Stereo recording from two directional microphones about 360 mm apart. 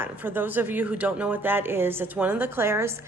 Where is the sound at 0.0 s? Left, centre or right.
Centre.